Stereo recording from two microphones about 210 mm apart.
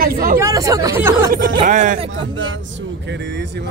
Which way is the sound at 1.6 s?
40° right (ahead or behind).